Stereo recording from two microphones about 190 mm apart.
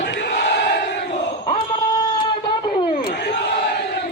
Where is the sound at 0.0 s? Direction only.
65° left (ahead or behind).